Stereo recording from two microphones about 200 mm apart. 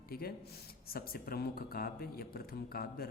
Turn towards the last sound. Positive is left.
turn(degrees=50)  # may be behind; listen again after turning